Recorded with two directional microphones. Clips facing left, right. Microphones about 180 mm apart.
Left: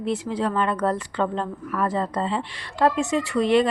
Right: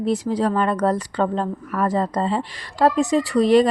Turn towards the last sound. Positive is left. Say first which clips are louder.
# right 4 dB
turn(degrees=-40)  # may be behind; listen again after turning